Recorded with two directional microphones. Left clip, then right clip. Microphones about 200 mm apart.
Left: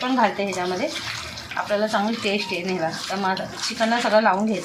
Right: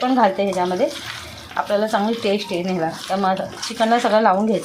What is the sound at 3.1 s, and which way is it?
A woman's voice, 55° right (ahead or behind).